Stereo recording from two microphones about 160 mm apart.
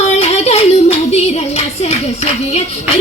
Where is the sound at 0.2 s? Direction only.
40° left (ahead or behind).